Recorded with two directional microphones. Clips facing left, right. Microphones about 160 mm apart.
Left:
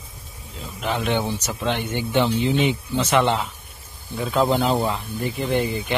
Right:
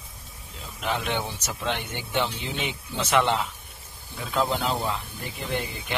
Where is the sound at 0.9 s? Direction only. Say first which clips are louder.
Left 5 dB; 15° left (ahead or behind).